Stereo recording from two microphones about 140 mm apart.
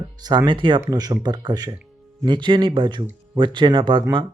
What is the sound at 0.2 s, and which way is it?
Speech, 30° right (ahead or behind).